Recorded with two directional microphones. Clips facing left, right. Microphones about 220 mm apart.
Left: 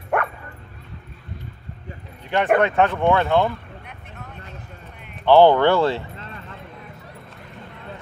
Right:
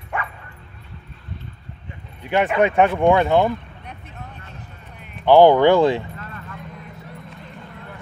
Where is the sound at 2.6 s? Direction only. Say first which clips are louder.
Right 3 dB; 15° right (ahead or behind).